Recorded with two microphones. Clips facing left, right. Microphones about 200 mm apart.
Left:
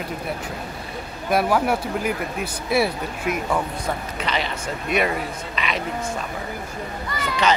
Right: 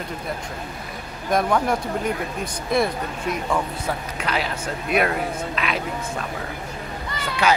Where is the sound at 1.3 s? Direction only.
5° left (ahead or behind).